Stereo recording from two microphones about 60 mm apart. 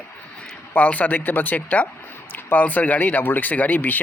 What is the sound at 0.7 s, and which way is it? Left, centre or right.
Speech, left.